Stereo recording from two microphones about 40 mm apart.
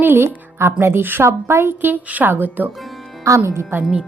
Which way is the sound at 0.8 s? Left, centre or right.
Right.